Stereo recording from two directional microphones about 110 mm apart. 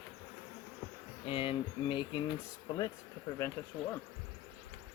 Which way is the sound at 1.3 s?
55° left (ahead or behind).